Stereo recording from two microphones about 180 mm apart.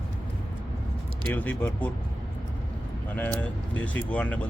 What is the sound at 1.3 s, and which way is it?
Speech, 10° left (ahead or behind).